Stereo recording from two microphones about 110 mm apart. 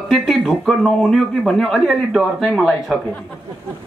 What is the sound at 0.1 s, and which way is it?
Speech, centre (ahead or behind).